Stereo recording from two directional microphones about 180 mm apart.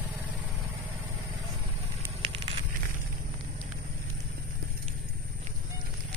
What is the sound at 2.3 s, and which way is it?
Crackle, 30° right (ahead or behind).